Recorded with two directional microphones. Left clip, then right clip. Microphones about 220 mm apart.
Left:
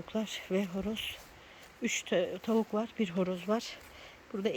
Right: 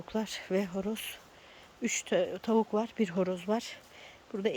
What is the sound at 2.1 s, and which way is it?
Speech, 15° right (ahead or behind).